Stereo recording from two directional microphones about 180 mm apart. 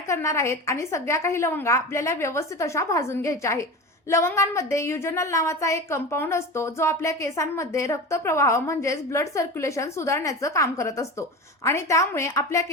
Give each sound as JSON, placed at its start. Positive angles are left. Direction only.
{"t": 0.1, "sound": "a woman's voice", "side_deg": 15}